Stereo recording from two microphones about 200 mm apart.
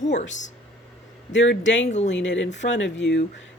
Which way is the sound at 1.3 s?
65° left (ahead or behind).